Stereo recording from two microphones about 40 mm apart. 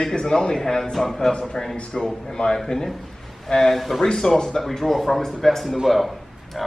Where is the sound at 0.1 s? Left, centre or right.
Centre.